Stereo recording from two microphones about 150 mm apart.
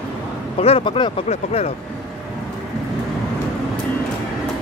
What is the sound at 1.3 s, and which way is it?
Speech, 50° left (ahead or behind).